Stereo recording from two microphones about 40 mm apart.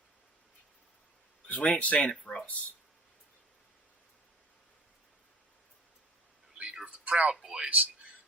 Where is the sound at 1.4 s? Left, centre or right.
Left.